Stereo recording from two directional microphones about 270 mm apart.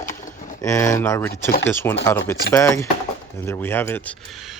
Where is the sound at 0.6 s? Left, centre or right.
Centre.